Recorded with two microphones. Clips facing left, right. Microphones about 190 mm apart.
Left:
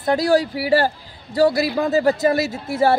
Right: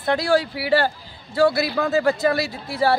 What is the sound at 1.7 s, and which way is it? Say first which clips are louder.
Speech: left 2 dB; 15° left (ahead or behind).